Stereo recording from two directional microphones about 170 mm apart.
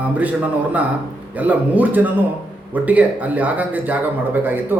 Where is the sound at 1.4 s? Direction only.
10° right (ahead or behind).